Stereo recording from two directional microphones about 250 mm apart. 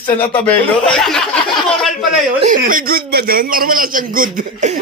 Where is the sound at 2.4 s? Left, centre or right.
Right.